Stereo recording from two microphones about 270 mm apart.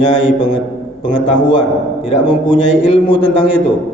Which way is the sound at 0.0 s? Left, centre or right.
Centre.